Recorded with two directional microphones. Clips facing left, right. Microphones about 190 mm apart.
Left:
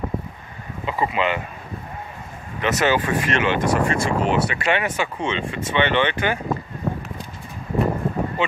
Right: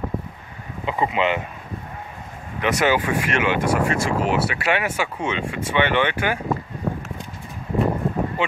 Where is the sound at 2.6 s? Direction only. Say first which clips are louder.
Even; 10° right (ahead or behind).